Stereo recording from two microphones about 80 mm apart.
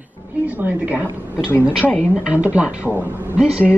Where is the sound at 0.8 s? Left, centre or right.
Centre.